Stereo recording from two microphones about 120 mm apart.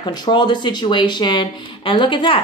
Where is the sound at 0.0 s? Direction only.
40° left (ahead or behind).